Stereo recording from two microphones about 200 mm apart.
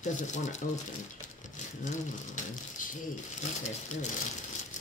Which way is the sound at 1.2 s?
40° left (ahead or behind).